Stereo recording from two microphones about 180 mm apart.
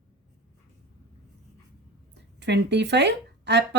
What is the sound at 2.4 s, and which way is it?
Speech, 70° right (ahead or behind).